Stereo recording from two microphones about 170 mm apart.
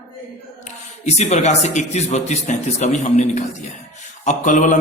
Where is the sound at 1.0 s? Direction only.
40° left (ahead or behind).